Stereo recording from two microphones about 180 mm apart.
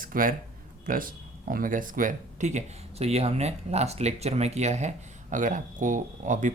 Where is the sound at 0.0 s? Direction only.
50° right (ahead or behind).